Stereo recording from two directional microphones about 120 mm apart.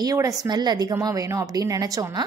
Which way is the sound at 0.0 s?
30° right (ahead or behind).